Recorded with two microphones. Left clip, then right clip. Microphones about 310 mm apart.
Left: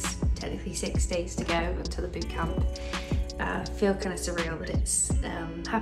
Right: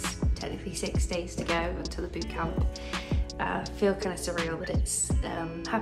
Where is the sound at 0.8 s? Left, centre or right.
Centre.